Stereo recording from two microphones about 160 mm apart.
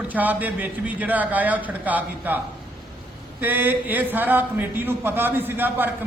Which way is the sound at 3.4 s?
10° right (ahead or behind).